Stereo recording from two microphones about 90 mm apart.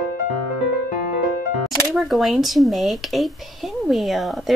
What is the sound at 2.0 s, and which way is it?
A woman's voice, centre (ahead or behind).